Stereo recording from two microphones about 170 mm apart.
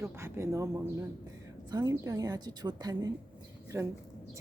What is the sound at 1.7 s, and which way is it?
A woman's voice, 25° right (ahead or behind).